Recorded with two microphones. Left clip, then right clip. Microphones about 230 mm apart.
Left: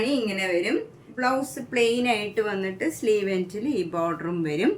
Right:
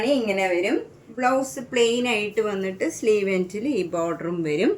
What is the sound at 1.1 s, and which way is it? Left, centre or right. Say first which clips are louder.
A woman's voice: right 3 dB; centre.